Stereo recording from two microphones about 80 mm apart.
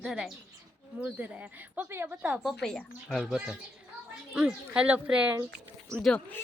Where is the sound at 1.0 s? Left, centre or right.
Centre.